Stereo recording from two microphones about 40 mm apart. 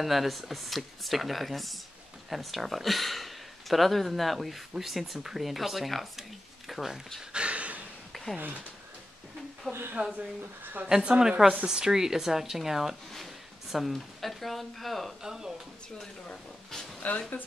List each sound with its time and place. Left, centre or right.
0.0 s speech: centre
7.3 s a sound: right
9.7 s speech: right
10.1 s speech: right
11.1 s speech: centre
15.2 s speech: centre
17.0 s speech: left